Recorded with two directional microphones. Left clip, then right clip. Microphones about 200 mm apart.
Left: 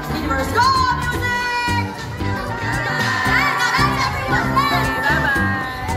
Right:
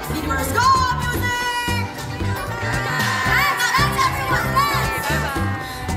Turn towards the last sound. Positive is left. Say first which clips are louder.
# left 1 dB
turn(degrees=-60)  # may be behind; listen again after turning